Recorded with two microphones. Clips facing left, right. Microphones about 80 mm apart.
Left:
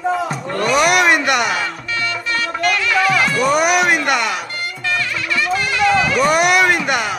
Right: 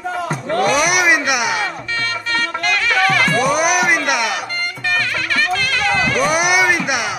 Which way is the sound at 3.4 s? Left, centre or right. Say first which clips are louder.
Left 1 dB; centre.